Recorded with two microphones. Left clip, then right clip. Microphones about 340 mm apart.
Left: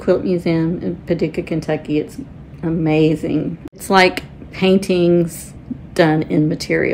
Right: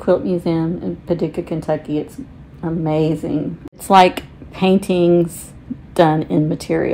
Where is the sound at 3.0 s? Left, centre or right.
Right.